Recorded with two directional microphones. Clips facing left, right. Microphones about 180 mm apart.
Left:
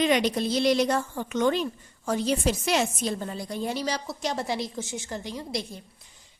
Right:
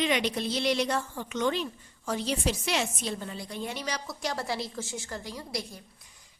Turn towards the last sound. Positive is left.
turn(degrees=20)  # may be behind; listen again after turning